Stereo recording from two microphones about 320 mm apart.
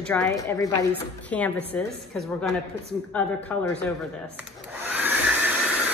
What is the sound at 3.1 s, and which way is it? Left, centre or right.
Speech, centre.